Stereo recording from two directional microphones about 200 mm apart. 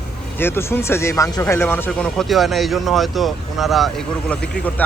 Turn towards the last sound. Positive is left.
turn(degrees=5)  # may be behind; listen again after turning